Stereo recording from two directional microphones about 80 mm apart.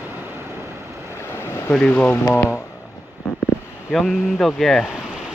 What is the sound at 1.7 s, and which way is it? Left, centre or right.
Speech, centre.